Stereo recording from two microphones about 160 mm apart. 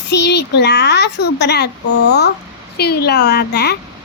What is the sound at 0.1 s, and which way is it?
A child's voice, 90° left.